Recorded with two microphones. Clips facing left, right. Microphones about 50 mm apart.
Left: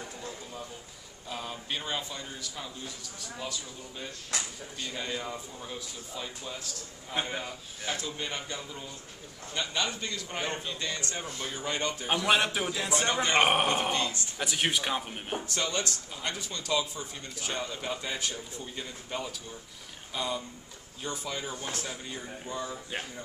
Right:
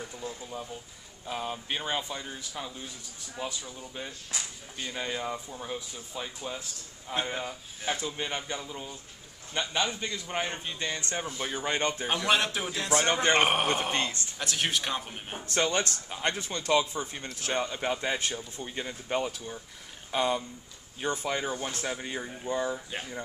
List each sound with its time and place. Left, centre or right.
0.2 s a sound: centre
1.2 s speech: centre
4.3 s speech: left
4.7 s speech: centre
7.3 s speech: centre; by 12.1 s right
12.1 s speech: centre
13.0 s speech: right
13.3 s speech: centre
13.9 s speech: right
14.4 s speech: centre
15.4 s speech: right